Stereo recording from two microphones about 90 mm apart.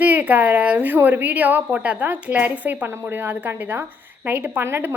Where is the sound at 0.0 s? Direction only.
20° right (ahead or behind).